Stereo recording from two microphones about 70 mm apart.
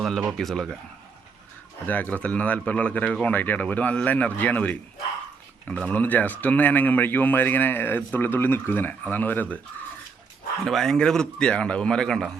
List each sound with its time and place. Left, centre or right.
0.3 s speech: centre
1.9 s speech: left
10.6 s a man's voice: centre